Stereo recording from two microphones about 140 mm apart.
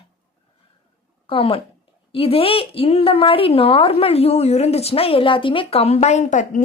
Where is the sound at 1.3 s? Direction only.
40° left (ahead or behind).